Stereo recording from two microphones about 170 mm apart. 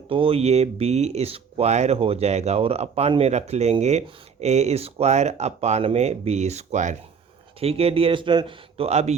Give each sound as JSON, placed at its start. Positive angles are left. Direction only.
{"t": 0.1, "sound": "speech", "side_deg": -30}